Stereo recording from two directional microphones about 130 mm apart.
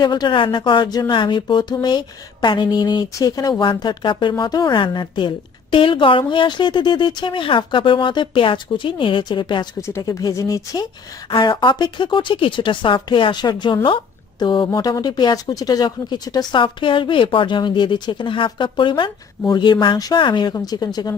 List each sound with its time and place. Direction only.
0.0 s speech: 35° left (ahead or behind)
9.8 s speech: 25° left (ahead or behind)